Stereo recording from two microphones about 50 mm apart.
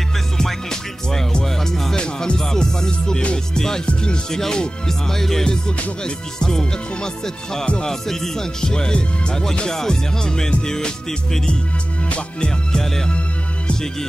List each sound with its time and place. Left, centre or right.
0.4 s music: centre